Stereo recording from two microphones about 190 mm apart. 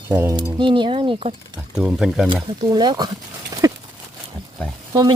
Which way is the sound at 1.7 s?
5° right (ahead or behind).